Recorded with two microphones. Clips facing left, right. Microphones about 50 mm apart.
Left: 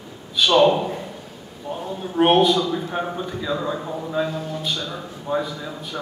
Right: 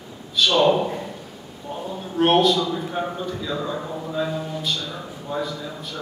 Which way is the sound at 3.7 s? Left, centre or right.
Centre.